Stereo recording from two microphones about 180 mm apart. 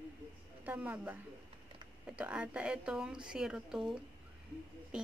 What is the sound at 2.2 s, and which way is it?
A woman's voice, 5° right (ahead or behind).